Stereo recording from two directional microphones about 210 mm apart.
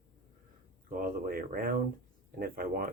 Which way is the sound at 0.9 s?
40° right (ahead or behind).